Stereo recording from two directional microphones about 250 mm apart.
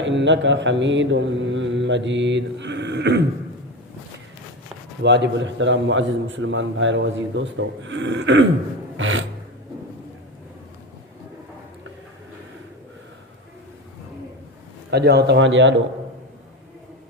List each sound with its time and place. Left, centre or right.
0.0 s mantra: right
5.0 s mantra: right
9.0 s a sound: right
14.8 s a man's voice: right